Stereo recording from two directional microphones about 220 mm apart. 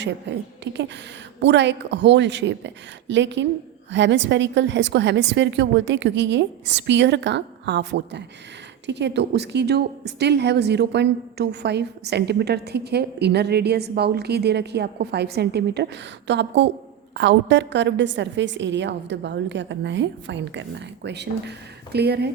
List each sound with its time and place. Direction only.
0.0 s a woman's voice: 50° right (ahead or behind)